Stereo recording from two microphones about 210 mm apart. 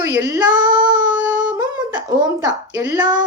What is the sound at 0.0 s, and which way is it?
Child singing, 10° right (ahead or behind).